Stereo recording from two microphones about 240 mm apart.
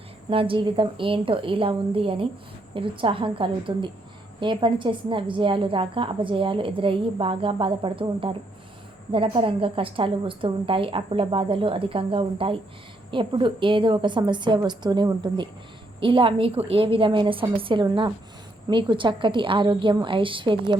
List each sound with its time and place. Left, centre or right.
0.3 s a woman's voice: right